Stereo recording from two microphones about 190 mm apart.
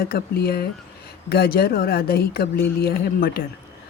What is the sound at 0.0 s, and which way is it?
Speech, 55° left (ahead or behind).